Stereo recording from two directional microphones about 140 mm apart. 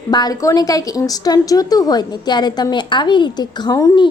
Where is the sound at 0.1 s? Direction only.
30° left (ahead or behind).